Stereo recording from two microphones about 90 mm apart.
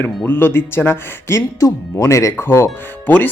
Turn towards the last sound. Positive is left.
turn(degrees=20)  # may be behind; listen again after turning